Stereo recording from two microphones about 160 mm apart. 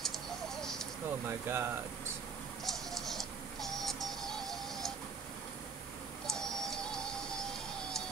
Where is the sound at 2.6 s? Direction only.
Centre (ahead or behind).